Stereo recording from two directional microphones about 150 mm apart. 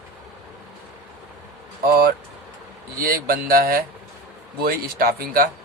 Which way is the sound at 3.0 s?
75° right (ahead or behind).